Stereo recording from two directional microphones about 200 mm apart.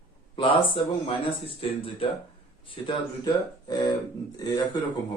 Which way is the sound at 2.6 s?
25° left (ahead or behind).